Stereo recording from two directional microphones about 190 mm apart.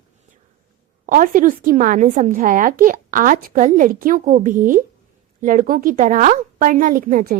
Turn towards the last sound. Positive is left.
turn(degrees=-45)  # may be behind; listen again after turning